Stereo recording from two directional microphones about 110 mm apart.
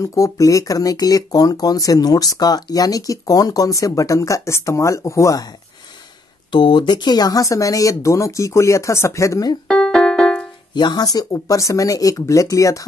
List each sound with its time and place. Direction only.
0.0 s speech: 30° left (ahead or behind)
6.5 s speech: 45° left (ahead or behind); by 9.5 s 30° left (ahead or behind)
9.7 s music: 5° left (ahead or behind)
10.7 s speech: 40° left (ahead or behind)